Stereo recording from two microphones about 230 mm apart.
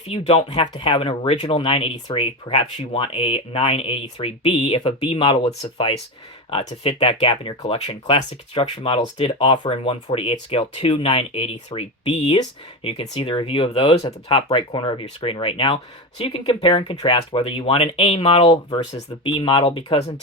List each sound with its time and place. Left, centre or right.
0.1 s speech: left